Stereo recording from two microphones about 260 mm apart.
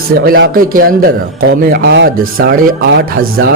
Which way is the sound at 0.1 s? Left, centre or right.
Right.